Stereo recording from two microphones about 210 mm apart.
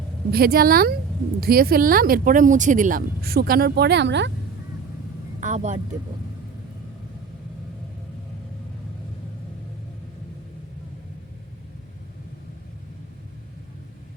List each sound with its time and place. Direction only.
0.3 s speech: 45° right (ahead or behind)
5.4 s speech: 35° right (ahead or behind)